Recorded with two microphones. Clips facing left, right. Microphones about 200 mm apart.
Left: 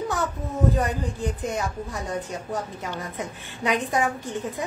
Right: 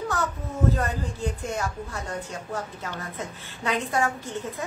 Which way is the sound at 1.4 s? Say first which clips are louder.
Left 2 dB; 15° left (ahead or behind).